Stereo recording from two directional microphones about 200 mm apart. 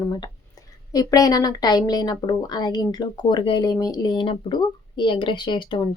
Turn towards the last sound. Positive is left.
turn(degrees=25)  # may be behind; listen again after turning